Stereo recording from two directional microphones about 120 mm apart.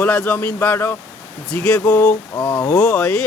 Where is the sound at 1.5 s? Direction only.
5° left (ahead or behind).